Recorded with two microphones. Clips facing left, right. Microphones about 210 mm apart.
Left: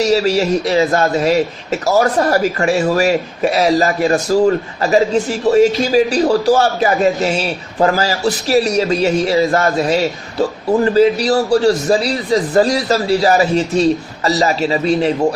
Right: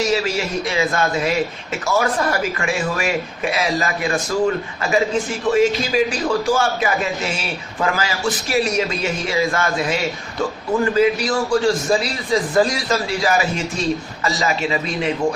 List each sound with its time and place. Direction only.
0.0 s a man's voice: 40° left (ahead or behind)